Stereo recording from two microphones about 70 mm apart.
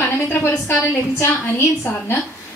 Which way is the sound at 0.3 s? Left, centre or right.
Left.